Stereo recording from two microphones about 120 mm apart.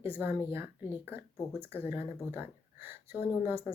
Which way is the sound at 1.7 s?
20° right (ahead or behind).